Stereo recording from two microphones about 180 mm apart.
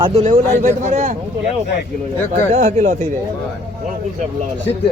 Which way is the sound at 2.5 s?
40° right (ahead or behind).